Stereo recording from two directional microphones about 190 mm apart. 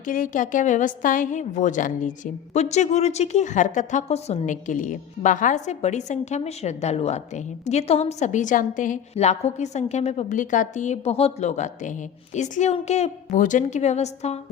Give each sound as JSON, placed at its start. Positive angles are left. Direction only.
{"t": 0.0, "sound": "a woman's voice", "side_deg": 45}